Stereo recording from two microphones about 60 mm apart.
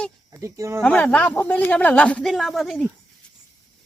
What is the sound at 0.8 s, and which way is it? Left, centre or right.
Speech, left.